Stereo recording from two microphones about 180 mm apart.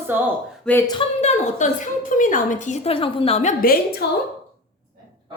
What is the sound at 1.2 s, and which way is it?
A woman's voice, 40° left (ahead or behind).